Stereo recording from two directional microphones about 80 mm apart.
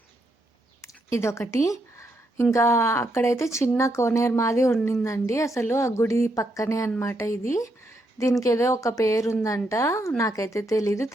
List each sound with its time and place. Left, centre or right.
0.8 s a woman's voice: left